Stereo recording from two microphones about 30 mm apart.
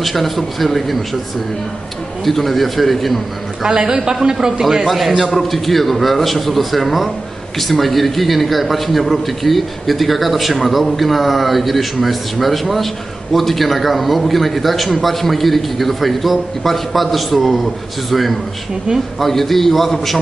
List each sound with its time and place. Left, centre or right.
0.0 s a man's voice: centre
2.2 s a man's voice: centre
3.6 s a man's voice: right
4.8 s a man's voice: centre
19.1 s a man's voice: centre